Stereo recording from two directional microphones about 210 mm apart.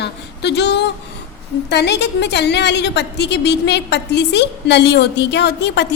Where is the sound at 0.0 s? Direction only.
55° left (ahead or behind).